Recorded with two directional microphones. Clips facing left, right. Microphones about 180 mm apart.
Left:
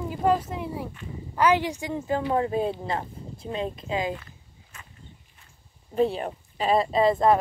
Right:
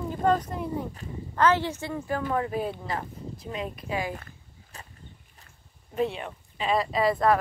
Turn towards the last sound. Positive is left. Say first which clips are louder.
# left 3 dB
turn(degrees=25)  # may be behind; listen again after turning